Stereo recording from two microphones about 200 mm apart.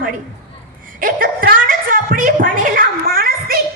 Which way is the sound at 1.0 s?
45° right (ahead or behind).